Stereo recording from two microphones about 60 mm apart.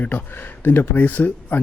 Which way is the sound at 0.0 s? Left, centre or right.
Left.